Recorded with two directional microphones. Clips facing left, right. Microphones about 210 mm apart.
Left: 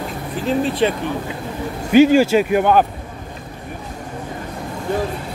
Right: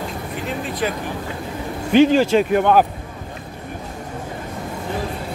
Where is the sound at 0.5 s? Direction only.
30° left (ahead or behind).